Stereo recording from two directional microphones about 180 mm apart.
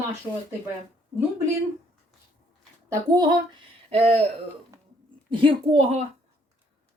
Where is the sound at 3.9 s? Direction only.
35° right (ahead or behind).